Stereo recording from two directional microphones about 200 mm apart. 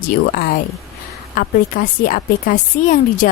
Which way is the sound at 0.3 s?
45° left (ahead or behind).